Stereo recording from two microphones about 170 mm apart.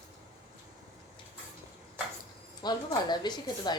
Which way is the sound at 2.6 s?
25° left (ahead or behind).